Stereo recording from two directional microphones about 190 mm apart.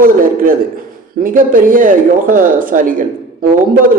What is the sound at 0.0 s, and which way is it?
Speech, 45° right (ahead or behind).